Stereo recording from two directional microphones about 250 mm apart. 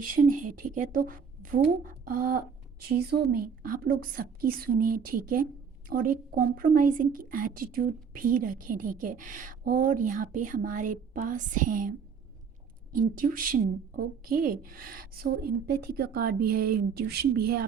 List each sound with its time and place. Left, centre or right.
0.0 s speech: right